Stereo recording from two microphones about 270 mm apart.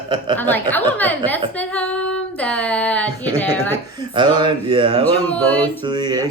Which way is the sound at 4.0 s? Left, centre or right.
Centre.